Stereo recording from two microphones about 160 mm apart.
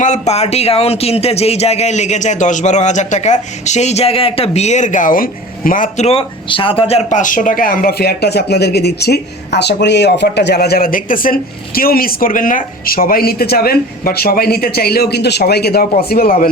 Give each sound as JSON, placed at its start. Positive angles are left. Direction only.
{"t": 0.0, "sound": "speech", "side_deg": 45}
{"t": 6.1, "sound": "speech", "side_deg": 35}